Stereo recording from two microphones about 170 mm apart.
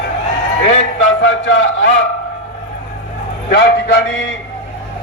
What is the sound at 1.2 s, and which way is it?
Speech, 90° left.